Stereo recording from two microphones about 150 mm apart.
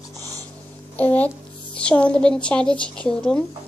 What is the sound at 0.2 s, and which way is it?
Dog, 25° right (ahead or behind).